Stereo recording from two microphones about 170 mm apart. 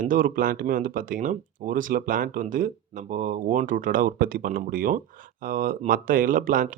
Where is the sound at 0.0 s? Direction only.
55° right (ahead or behind).